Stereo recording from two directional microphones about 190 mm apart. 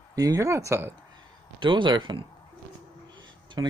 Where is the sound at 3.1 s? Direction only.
25° right (ahead or behind).